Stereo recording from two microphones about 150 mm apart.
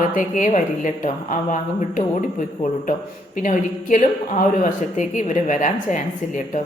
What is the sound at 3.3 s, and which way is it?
A woman's voice, 60° left (ahead or behind).